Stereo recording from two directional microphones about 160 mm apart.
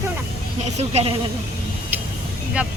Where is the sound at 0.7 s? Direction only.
40° right (ahead or behind).